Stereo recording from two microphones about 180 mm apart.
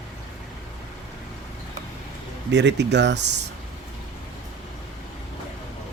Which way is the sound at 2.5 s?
75° right (ahead or behind).